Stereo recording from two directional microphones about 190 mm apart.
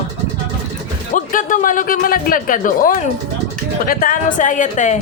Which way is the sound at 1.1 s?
45° left (ahead or behind).